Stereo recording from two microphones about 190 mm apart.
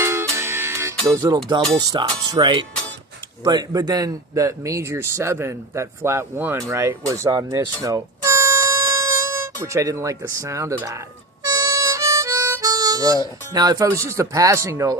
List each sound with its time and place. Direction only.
0.0 s music: 15° right (ahead or behind)
1.0 s speech: 15° right (ahead or behind)
11.4 s harmonica: 15° right (ahead or behind)
13.5 s speech: 20° right (ahead or behind)